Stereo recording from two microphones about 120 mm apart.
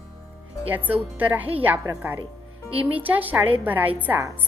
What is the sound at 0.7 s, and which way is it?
A woman's voice, 15° right (ahead or behind).